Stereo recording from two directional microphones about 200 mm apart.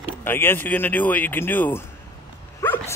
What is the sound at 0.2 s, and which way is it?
Speech, 10° left (ahead or behind).